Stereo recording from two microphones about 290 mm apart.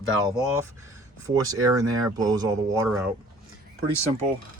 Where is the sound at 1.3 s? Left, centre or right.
Centre.